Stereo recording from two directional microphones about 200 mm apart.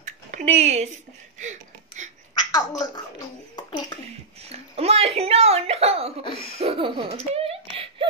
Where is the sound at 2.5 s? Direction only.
20° left (ahead or behind).